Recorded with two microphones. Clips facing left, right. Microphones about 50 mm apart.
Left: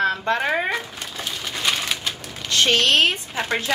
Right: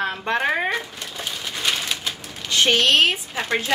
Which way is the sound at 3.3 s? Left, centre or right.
Centre.